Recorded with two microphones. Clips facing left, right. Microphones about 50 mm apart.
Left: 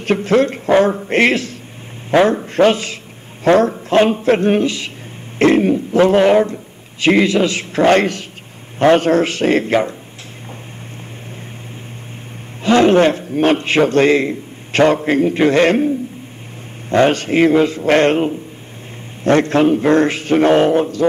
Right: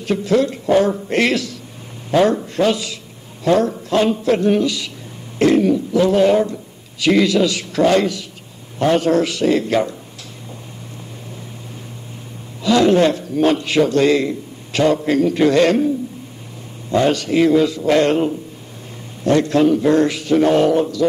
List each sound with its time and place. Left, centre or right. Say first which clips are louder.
0.0 s a man's voice: left 3 dB; left
12.6 s a man's voice: left 2 dB; left
16.9 s a man's voice: left 3 dB; left